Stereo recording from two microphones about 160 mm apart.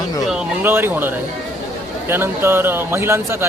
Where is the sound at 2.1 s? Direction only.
15° right (ahead or behind).